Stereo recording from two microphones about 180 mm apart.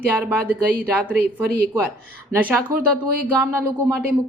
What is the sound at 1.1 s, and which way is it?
Speech, 60° right (ahead or behind).